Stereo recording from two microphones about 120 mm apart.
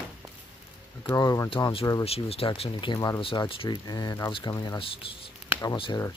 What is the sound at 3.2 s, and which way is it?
Speech, 45° left (ahead or behind).